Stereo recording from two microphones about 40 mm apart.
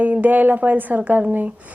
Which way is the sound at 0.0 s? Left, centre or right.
Right.